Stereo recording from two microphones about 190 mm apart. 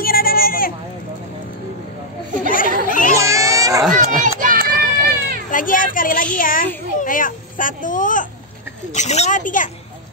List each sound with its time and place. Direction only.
0.0 s bleat: 50° left (ahead or behind)
2.4 s chatter: 45° left (ahead or behind)
2.9 s baby cry: 45° left (ahead or behind)
3.2 s baby cry: 15° right (ahead or behind)
4.0 s children playing: 45° right (ahead or behind)
5.5 s a sound: 45° left (ahead or behind)
5.9 s a child's voice: 45° left (ahead or behind)